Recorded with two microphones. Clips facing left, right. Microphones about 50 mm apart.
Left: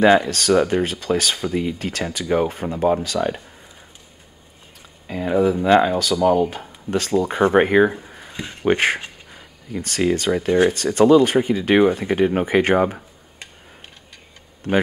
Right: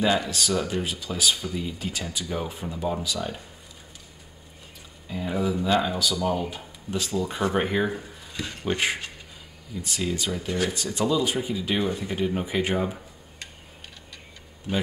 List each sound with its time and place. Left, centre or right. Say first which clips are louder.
0.0 s speech: left 9 dB; left
5.0 s speech: left 9 dB; left
8.7 s speech: left 7 dB; left